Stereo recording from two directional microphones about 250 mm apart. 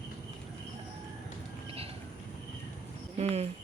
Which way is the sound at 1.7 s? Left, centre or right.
Right.